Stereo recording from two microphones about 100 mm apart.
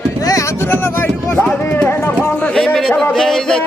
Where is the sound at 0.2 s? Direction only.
35° left (ahead or behind); by 2.6 s 15° left (ahead or behind).